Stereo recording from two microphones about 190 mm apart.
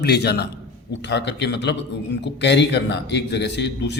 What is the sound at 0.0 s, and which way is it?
A man's voice, 60° left (ahead or behind).